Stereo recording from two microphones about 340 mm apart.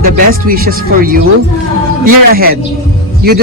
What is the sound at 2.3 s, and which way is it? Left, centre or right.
Speech, right.